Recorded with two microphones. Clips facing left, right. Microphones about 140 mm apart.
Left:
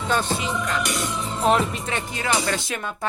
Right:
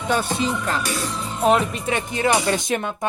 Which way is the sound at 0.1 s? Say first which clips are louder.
Right 1 dB; 15° right (ahead or behind).